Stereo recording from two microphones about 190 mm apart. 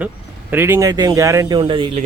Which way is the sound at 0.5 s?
10° right (ahead or behind).